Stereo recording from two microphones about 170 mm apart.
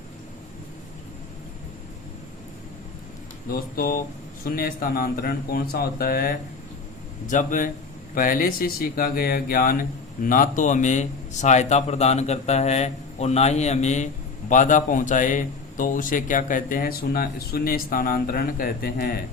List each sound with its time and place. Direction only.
3.5 s a man's voice: 55° left (ahead or behind)